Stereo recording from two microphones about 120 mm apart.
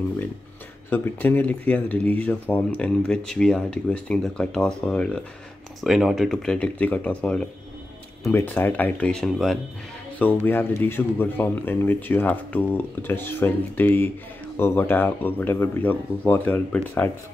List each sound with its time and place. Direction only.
0.8 s speech: 15° left (ahead or behind)
5.9 s speech: centre (ahead or behind)
10.1 s speech: 15° left (ahead or behind)